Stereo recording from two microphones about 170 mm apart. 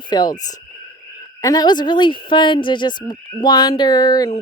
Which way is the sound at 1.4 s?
25° left (ahead or behind).